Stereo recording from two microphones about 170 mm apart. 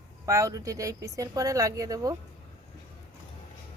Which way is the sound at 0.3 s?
20° right (ahead or behind).